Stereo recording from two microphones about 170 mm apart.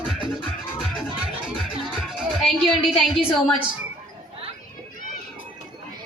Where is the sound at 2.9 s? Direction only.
35° left (ahead or behind).